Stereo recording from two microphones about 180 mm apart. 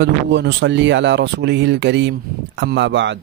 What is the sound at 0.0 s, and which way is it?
Speech, 75° right (ahead or behind).